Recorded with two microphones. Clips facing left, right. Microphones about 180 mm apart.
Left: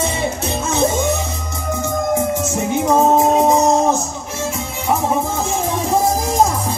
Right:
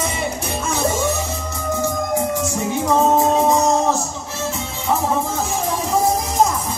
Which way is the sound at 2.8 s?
20° left (ahead or behind).